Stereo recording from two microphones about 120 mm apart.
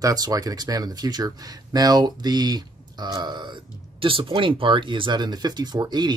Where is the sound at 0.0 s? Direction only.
30° right (ahead or behind).